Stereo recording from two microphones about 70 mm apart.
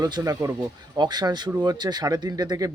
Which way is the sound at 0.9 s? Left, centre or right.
Right.